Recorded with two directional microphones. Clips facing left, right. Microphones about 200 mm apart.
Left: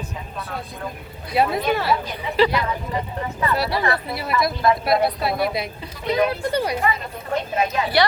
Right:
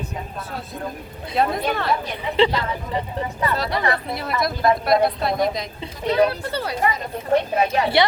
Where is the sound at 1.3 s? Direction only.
5° left (ahead or behind).